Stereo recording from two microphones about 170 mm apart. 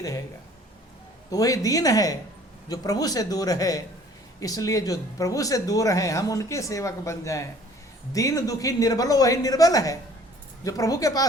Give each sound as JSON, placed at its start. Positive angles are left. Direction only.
{"t": 1.3, "sound": "a woman's voice", "side_deg": 20}